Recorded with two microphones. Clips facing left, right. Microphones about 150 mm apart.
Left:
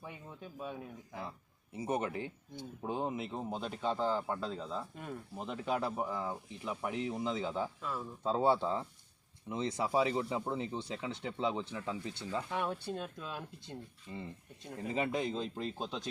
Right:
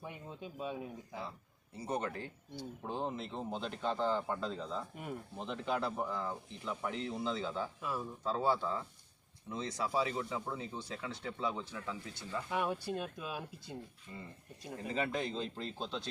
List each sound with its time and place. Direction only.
0.0 s speech: 15° right (ahead or behind)
1.7 s speech: 20° left (ahead or behind)
7.8 s speech: 15° right (ahead or behind)
8.2 s speech: 20° left (ahead or behind)
12.5 s speech: 10° right (ahead or behind)
14.1 s speech: 15° left (ahead or behind)